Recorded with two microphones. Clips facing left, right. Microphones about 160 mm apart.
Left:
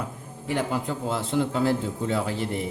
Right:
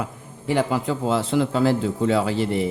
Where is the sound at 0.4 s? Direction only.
90° right.